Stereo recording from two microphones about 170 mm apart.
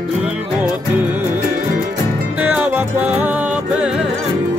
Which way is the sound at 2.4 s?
10° right (ahead or behind).